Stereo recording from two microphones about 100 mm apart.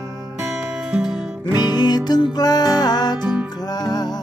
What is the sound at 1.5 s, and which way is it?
Music, 45° left (ahead or behind).